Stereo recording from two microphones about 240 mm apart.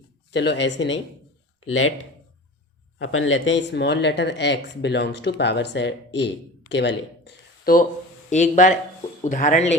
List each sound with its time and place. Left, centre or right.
0.3 s speech: left
3.0 s speech: left